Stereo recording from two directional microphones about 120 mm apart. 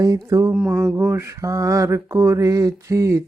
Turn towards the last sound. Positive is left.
turn(degrees=-25)  # may be behind; listen again after turning